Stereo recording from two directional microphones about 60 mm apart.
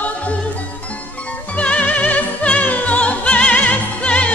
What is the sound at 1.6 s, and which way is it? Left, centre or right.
Opera, left.